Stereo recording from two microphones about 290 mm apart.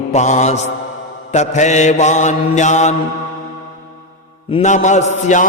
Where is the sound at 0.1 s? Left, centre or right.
Left.